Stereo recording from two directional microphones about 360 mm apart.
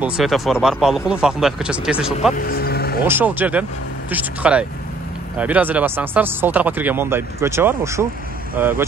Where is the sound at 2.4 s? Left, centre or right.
Left.